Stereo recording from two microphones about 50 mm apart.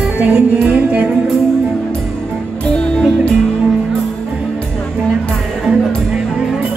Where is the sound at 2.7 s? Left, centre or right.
Centre.